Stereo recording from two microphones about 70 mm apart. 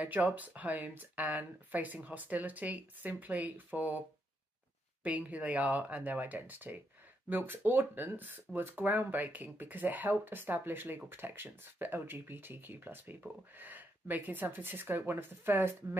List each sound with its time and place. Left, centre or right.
0.0 s speech: right
5.0 s speech: right